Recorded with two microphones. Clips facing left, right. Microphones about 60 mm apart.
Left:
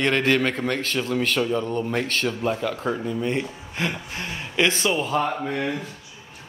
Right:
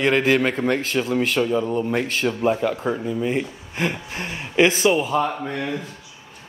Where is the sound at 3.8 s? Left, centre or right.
Right; by 5.7 s centre.